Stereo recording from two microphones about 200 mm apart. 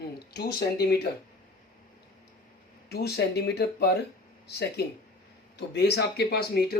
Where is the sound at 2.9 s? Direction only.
55° left (ahead or behind).